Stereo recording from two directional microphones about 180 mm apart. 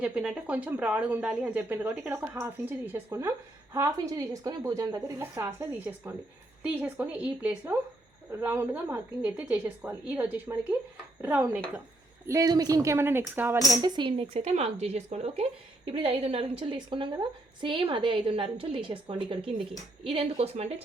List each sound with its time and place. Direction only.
0.0 s a woman's voice: 5° right (ahead or behind); by 20.8 s 35° right (ahead or behind)